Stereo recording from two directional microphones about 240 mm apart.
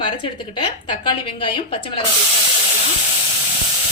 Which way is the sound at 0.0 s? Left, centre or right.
Centre.